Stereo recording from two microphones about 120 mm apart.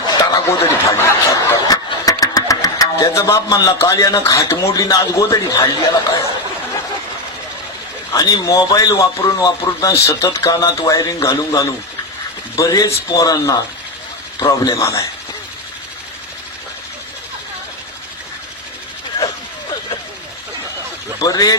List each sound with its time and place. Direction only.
0.2 s speech: 25° left (ahead or behind)
8.1 s a man's voice: 30° left (ahead or behind)
21.2 s speech: 30° left (ahead or behind)